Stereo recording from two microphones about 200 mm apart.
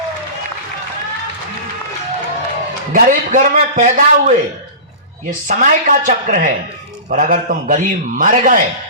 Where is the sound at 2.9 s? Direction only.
40° right (ahead or behind).